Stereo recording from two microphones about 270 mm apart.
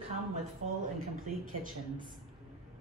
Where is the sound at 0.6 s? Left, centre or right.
Right.